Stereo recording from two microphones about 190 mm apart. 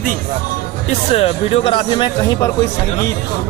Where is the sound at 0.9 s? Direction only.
35° left (ahead or behind).